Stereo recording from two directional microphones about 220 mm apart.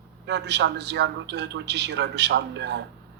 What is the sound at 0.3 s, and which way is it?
A woman's voice, 50° right (ahead or behind).